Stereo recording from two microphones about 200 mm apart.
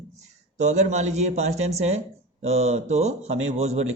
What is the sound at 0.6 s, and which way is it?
Speech, 35° right (ahead or behind).